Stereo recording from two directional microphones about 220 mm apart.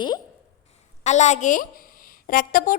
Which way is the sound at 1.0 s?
30° left (ahead or behind).